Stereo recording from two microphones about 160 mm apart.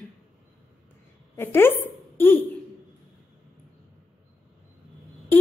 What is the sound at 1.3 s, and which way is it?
A woman's voice, 15° left (ahead or behind).